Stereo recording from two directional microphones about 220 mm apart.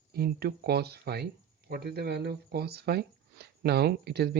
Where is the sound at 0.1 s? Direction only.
45° right (ahead or behind).